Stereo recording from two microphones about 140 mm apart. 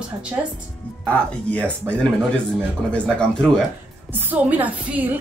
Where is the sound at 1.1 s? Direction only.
10° left (ahead or behind).